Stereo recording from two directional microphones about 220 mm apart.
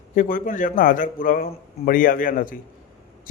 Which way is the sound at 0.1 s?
35° left (ahead or behind).